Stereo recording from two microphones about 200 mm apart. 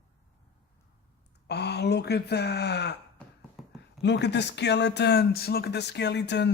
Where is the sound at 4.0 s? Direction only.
60° left (ahead or behind).